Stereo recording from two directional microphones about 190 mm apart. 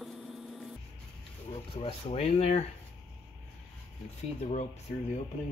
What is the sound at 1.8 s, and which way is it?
Speech, 30° left (ahead or behind).